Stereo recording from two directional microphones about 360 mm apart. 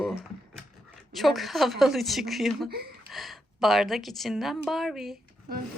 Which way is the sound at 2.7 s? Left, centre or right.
Right.